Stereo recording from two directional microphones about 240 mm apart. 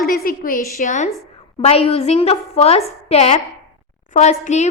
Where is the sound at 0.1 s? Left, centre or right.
Left.